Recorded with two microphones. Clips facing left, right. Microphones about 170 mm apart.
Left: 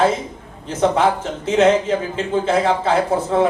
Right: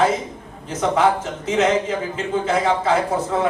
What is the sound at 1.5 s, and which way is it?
Speech, 30° left (ahead or behind).